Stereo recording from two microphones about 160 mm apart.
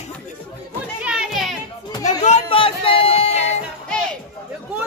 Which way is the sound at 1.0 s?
5° right (ahead or behind).